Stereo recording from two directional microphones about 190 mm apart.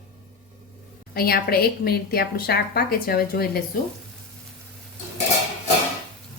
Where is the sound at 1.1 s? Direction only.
55° left (ahead or behind).